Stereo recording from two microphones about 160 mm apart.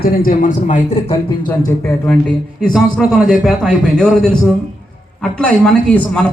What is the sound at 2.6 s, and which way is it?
A man's voice, centre (ahead or behind).